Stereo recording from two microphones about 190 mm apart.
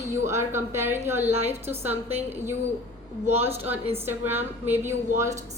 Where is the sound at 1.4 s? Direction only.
10° right (ahead or behind).